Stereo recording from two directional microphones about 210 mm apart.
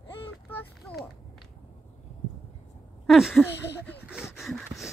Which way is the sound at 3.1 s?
Centre (ahead or behind).